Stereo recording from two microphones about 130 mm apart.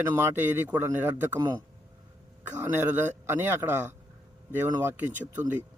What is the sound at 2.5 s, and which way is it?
A man's voice, 15° right (ahead or behind).